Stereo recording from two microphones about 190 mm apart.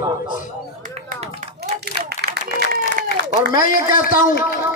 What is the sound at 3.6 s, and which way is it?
Speech, 45° left (ahead or behind).